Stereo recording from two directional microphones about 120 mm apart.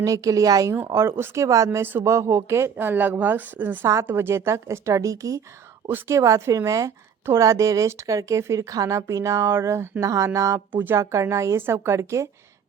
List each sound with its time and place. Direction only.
0.0 s a woman's voice: 30° right (ahead or behind)